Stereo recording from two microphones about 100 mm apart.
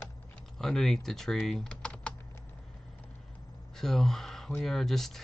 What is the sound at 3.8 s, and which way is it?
Speech, 5° left (ahead or behind).